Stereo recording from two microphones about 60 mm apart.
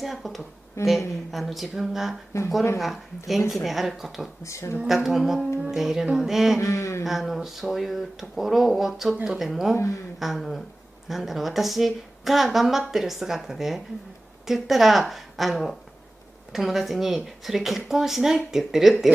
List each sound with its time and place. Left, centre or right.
0.0 s a woman's voice: centre
0.8 s a woman's voice: left
1.3 s a woman's voice: centre
3.3 s a woman's voice: centre
4.4 s a sound: left
4.8 s a sound: centre
5.6 s music: centre
6.1 s a woman's voice: centre
6.6 s a sound: left
7.1 s a woman's voice: centre
10.1 s a sound: centre
11.1 s a woman's voice: centre